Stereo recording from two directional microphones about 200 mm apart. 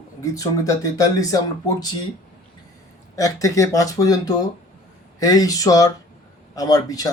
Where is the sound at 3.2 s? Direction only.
15° left (ahead or behind).